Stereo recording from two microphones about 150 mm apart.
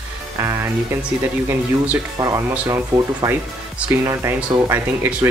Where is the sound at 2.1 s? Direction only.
25° right (ahead or behind).